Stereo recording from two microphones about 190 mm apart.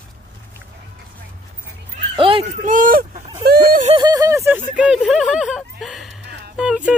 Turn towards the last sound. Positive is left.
turn(degrees=-5)  # may be behind; listen again after turning